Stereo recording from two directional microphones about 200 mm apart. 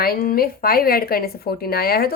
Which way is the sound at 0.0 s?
50° left (ahead or behind).